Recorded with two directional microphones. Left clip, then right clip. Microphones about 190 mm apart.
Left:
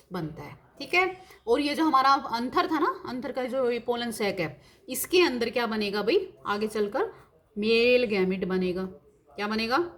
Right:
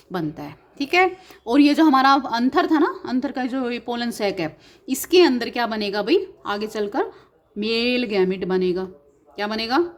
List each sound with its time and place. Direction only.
0.1 s a woman's voice: 45° right (ahead or behind)